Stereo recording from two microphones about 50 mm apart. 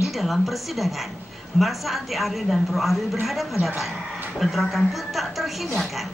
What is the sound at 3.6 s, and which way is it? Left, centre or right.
Speech, right.